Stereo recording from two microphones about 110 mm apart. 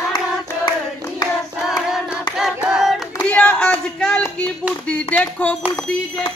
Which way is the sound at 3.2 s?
10° left (ahead or behind).